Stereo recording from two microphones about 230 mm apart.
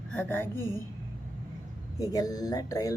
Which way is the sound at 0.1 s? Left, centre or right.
Centre.